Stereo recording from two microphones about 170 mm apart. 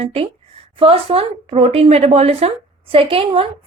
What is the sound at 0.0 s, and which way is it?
A woman's voice, 35° right (ahead or behind).